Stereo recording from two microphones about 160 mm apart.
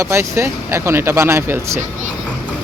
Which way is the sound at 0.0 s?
15° right (ahead or behind).